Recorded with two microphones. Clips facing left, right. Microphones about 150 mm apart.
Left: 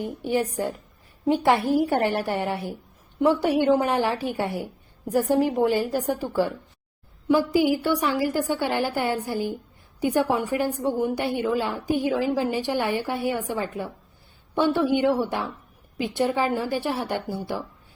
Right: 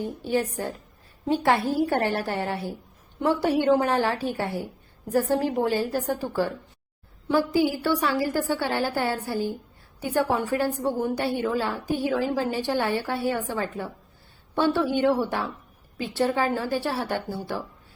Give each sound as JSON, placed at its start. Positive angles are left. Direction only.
{"t": 0.0, "sound": "a woman's voice", "side_deg": 15}